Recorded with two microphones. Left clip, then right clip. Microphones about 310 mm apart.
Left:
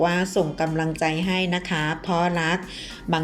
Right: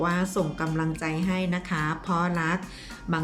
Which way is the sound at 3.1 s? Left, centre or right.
Centre.